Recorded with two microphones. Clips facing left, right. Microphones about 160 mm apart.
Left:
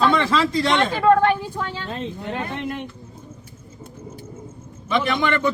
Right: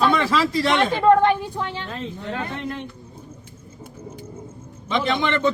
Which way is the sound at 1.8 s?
20° left (ahead or behind).